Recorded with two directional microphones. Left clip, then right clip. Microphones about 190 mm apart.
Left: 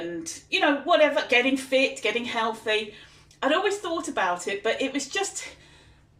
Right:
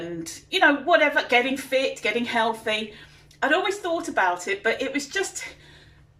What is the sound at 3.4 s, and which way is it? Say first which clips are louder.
Speech: right 1 dB; 15° left (ahead or behind).